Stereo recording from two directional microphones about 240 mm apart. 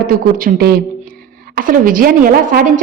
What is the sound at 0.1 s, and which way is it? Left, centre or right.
A woman's voice, right.